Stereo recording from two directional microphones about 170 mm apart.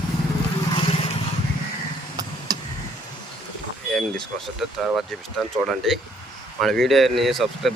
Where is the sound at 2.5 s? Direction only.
20° right (ahead or behind).